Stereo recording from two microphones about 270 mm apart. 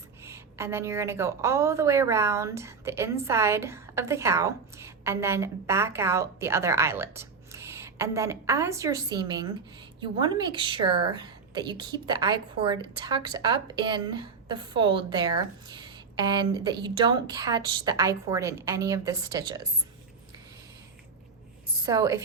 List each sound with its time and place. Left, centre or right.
0.2 s a woman's voice: centre
21.8 s a woman's voice: centre